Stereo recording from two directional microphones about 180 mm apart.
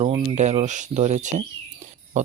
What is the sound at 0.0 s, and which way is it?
Speech, 35° right (ahead or behind).